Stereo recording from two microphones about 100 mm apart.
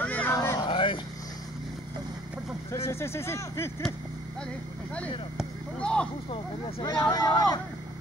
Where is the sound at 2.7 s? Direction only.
25° left (ahead or behind).